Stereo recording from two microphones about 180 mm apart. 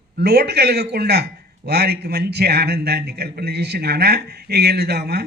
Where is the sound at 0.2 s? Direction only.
65° right (ahead or behind).